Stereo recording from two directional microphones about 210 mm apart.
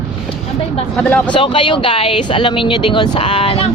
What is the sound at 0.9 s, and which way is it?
Speech, 5° left (ahead or behind).